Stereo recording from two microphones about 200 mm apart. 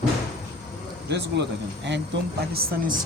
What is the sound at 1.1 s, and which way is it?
Speech, 60° right (ahead or behind).